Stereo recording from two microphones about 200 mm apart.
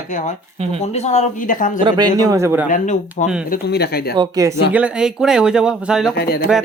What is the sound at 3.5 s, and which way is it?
Speech, 55° left (ahead or behind).